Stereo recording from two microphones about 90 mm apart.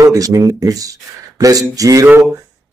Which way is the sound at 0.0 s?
40° right (ahead or behind).